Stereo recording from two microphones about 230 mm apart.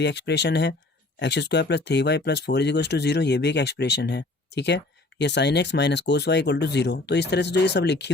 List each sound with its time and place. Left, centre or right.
0.0 s speech: left